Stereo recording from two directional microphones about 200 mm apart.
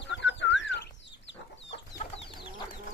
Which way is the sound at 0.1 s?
65° left (ahead or behind).